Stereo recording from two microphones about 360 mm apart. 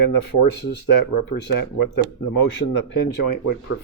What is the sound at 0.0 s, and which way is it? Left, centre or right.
Speech, left.